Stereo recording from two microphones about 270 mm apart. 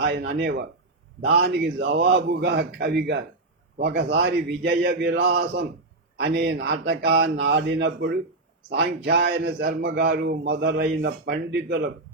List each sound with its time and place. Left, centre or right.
0.0 s a man's voice: right